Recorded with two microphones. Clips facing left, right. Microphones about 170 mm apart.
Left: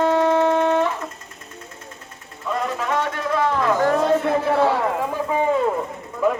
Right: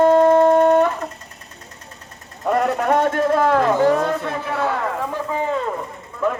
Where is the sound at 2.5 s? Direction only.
60° right (ahead or behind).